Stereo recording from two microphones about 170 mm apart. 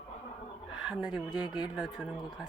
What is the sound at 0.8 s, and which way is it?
Speech, 5° right (ahead or behind).